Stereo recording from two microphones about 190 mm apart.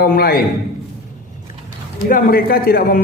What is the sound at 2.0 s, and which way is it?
Speech, 50° left (ahead or behind).